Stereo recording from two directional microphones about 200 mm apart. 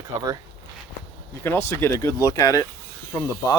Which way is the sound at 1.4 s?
10° left (ahead or behind).